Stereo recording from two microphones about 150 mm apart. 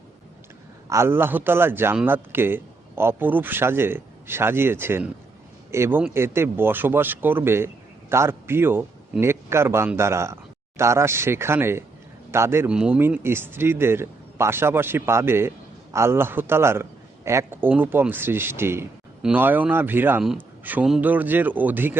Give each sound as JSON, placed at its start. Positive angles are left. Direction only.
{"t": 0.9, "sound": "speech", "side_deg": -15}